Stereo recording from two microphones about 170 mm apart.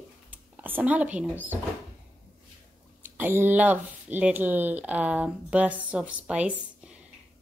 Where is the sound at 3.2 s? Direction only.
10° right (ahead or behind).